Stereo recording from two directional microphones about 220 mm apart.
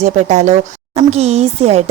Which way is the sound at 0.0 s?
30° right (ahead or behind).